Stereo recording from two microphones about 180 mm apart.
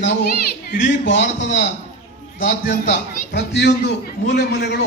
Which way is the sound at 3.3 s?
70° left (ahead or behind).